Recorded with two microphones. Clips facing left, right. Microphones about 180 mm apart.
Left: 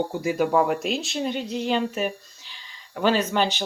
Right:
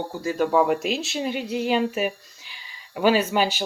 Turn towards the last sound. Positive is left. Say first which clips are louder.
# right 1 dB
turn(degrees=-10)  # may be behind; listen again after turning